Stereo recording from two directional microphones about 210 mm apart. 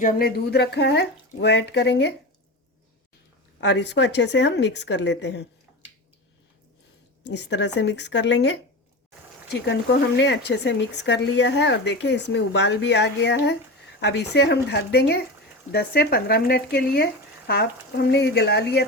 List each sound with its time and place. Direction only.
0.0 s speech: 45° left (ahead or behind)
3.6 s speech: 55° left (ahead or behind)
7.3 s speech: 55° left (ahead or behind)